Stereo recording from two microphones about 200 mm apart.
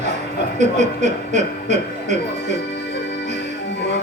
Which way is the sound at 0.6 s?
35° right (ahead or behind).